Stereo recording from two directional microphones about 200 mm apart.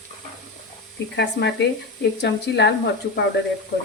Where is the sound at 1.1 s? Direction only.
60° left (ahead or behind).